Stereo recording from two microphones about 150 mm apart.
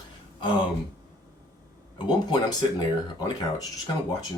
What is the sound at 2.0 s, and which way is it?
Speech, 30° left (ahead or behind).